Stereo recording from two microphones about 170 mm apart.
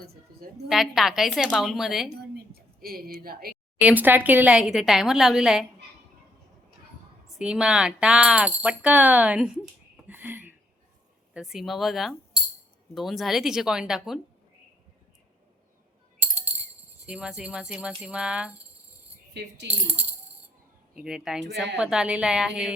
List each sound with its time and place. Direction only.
0.0 s a sound: 65° right (ahead or behind)
0.7 s speech: centre (ahead or behind)
2.3 s a sound: 60° right (ahead or behind)
3.8 s speech: 10° right (ahead or behind)
7.3 s speech: 5° right (ahead or behind)
10.1 s a sound: 10° right (ahead or behind)
11.3 s speech: centre (ahead or behind)
16.2 s music: 10° right (ahead or behind)
17.1 s speech: 5° right (ahead or behind)
19.3 s speech: 90° right
20.9 s speech: 5° right (ahead or behind)